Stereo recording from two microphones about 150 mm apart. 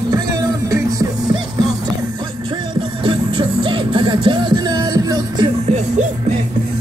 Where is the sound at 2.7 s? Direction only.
30° right (ahead or behind).